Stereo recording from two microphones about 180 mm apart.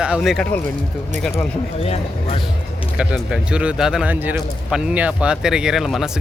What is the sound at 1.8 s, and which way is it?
Speech, 35° left (ahead or behind).